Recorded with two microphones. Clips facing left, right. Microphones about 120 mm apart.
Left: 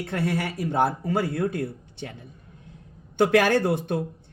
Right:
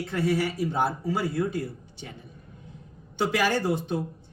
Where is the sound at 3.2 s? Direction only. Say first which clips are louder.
Left 5 dB; 60° left (ahead or behind).